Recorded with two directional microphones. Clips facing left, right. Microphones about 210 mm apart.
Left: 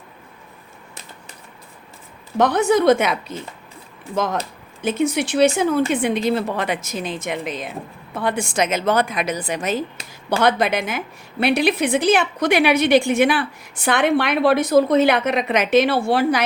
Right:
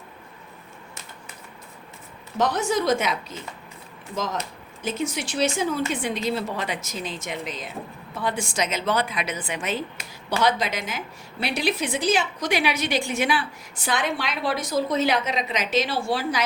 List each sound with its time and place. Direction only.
2.4 s a woman's voice: 60° left (ahead or behind)